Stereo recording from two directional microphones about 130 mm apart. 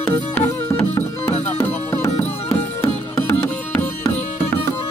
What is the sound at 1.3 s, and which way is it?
Music, 60° left (ahead or behind).